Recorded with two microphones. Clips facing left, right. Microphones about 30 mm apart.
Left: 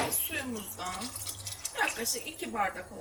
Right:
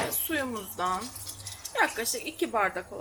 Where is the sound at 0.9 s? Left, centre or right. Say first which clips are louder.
Right 6 dB; left.